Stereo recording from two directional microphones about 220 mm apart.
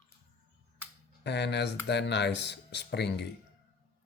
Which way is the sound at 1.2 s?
50° left (ahead or behind).